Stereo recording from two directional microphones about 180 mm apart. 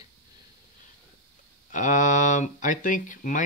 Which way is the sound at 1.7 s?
45° left (ahead or behind).